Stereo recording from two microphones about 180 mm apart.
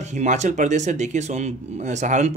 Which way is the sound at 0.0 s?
40° right (ahead or behind).